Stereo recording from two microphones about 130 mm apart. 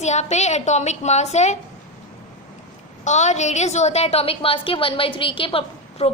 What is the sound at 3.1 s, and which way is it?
A woman's voice, 65° left (ahead or behind).